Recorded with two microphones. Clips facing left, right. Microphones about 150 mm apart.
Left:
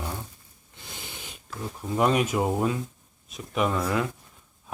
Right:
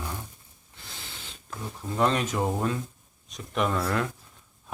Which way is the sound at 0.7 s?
20° left (ahead or behind).